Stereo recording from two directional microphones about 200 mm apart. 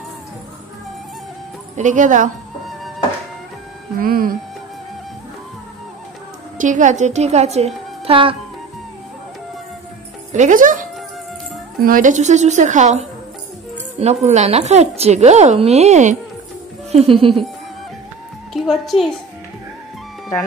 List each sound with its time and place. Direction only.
1.8 s a woman's voice: 40° right (ahead or behind)
4.0 s speech: 45° right (ahead or behind)
6.6 s a woman's voice: 40° right (ahead or behind)
10.3 s a woman's voice: 40° right (ahead or behind)
11.8 s a woman's voice: 40° right (ahead or behind); by 17.4 s 25° right (ahead or behind)
18.5 s a woman's voice: centre (ahead or behind)